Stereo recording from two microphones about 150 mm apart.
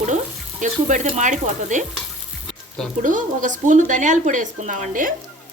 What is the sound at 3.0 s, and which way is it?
A woman's voice, 60° right (ahead or behind).